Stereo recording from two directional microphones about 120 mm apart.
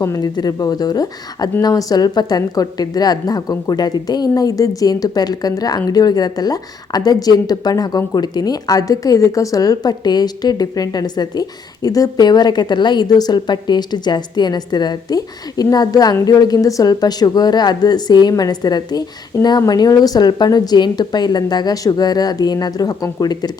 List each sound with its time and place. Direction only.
0.0 s a woman's voice: 30° left (ahead or behind)